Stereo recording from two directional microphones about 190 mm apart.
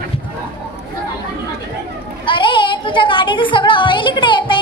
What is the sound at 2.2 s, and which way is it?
Speech, 25° left (ahead or behind).